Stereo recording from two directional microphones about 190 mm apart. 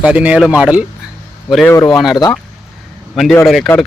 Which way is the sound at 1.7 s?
15° left (ahead or behind).